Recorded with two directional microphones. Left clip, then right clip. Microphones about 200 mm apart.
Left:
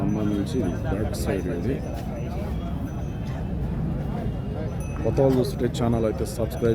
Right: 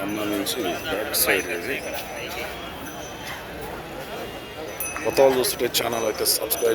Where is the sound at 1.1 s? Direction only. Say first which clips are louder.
Right 6 dB; 5° left (ahead or behind).